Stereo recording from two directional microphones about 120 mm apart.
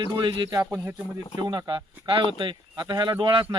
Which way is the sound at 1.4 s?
40° right (ahead or behind).